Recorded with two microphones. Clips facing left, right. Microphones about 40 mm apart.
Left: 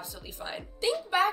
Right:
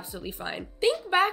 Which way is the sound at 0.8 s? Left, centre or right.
Right.